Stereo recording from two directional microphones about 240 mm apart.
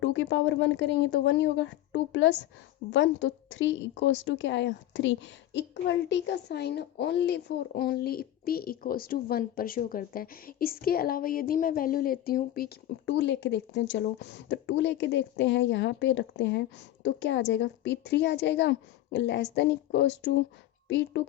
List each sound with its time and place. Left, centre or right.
0.0 s a woman's voice: left